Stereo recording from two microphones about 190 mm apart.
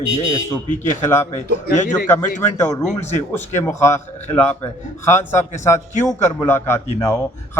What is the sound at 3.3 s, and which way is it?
A man's voice, 10° left (ahead or behind).